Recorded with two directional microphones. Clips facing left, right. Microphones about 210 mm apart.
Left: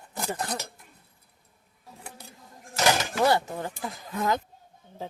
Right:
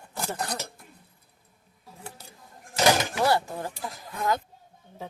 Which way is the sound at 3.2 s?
20° left (ahead or behind).